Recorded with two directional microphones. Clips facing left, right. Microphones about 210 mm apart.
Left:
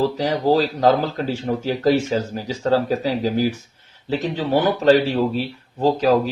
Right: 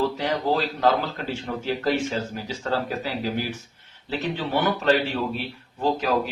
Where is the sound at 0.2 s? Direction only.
35° left (ahead or behind).